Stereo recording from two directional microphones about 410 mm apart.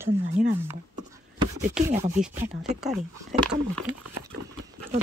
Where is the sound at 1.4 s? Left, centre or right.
Centre.